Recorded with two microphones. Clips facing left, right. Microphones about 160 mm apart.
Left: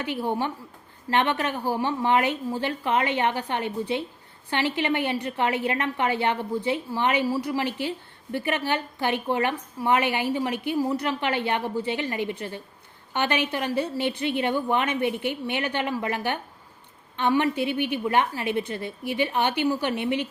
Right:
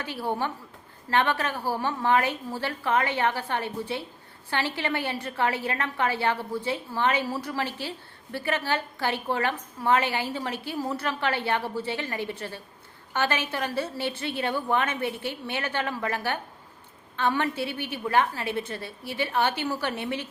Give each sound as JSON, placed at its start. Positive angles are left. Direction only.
{"t": 0.0, "sound": "a woman's voice", "side_deg": 15}